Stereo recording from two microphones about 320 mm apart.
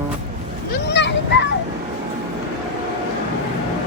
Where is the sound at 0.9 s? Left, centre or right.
Left.